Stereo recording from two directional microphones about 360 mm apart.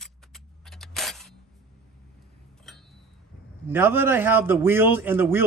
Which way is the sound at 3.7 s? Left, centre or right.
Centre.